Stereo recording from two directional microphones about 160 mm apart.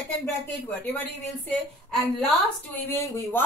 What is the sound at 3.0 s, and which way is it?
Speech, 15° left (ahead or behind).